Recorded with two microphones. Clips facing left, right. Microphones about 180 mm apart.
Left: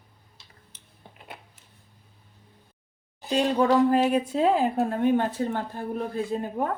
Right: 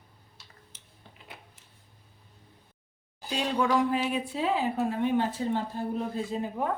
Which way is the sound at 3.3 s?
45° left (ahead or behind).